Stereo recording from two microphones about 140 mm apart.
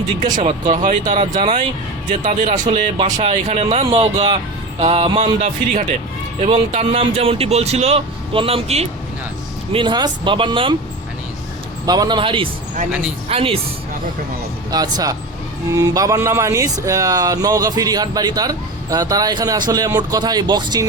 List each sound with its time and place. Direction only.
0.2 s speech: 70° right (ahead or behind)
3.0 s speech: 55° right (ahead or behind)
9.7 s speech: 35° right (ahead or behind)
11.9 s speech: 30° right (ahead or behind)
14.7 s speech: 25° right (ahead or behind)